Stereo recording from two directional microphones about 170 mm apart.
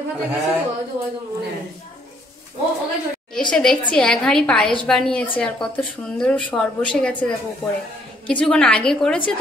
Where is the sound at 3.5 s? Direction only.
5° left (ahead or behind).